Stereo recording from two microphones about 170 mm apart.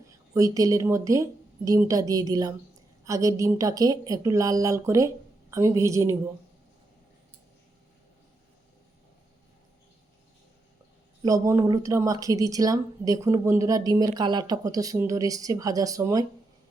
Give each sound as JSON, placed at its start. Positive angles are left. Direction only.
{"t": 0.3, "sound": "speech", "side_deg": -20}
{"t": 11.2, "sound": "speech", "side_deg": -20}